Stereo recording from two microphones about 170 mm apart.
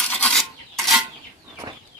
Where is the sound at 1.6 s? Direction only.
30° right (ahead or behind).